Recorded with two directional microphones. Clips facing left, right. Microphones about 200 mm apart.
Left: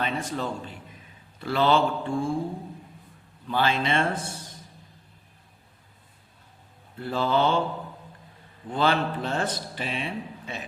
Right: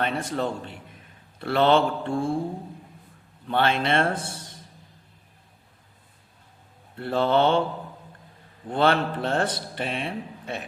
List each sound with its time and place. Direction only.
0.0 s a man's voice: 60° right (ahead or behind)
3.5 s a man's voice: 60° right (ahead or behind)
7.0 s a man's voice: 60° right (ahead or behind)
8.7 s a man's voice: 60° right (ahead or behind)